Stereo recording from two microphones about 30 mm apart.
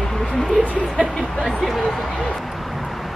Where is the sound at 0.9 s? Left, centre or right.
Right.